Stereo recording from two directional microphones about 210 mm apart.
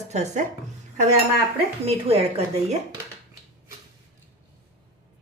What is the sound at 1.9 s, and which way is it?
Speech, 30° right (ahead or behind).